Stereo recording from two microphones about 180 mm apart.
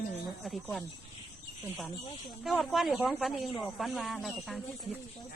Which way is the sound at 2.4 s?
Centre (ahead or behind).